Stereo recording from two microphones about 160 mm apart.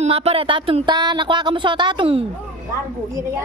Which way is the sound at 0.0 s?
40° right (ahead or behind).